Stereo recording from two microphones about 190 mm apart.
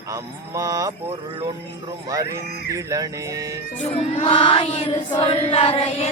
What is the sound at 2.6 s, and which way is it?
Speech, 15° right (ahead or behind).